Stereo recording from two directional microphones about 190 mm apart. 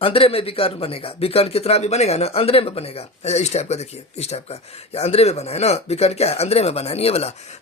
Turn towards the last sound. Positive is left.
turn(degrees=35)  # may be behind; listen again after turning